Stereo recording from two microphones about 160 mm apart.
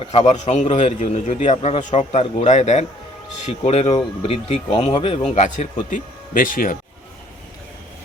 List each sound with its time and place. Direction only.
0.0 s a man's voice: 35° left (ahead or behind)
5.3 s speech: 50° left (ahead or behind)